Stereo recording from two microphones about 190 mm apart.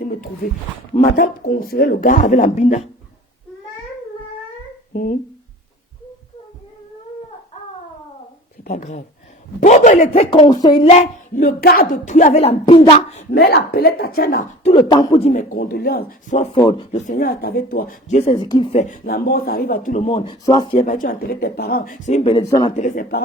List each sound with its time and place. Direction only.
0.0 s a sound: 50° left (ahead or behind)
1.0 s speech: 50° left (ahead or behind)
8.6 s speech: 40° left (ahead or behind)
11.3 s speech: 50° left (ahead or behind); by 13.2 s 30° left (ahead or behind)
13.3 s speech: 55° left (ahead or behind)
14.6 s speech: 30° left (ahead or behind)
15.3 s speech: 45° left (ahead or behind)
16.9 s speech: 40° left (ahead or behind)
18.3 s speech: 20° left (ahead or behind)
20.8 s speech: 45° left (ahead or behind)
22.3 s speech: 20° left (ahead or behind)
22.7 s speech: 40° left (ahead or behind)